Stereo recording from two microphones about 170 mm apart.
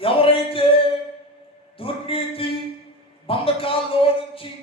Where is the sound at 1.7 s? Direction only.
35° left (ahead or behind).